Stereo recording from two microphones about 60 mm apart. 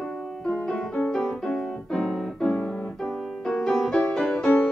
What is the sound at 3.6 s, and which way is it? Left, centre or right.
Music, centre.